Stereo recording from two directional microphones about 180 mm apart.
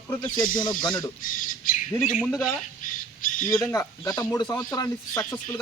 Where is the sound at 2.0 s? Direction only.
5° right (ahead or behind).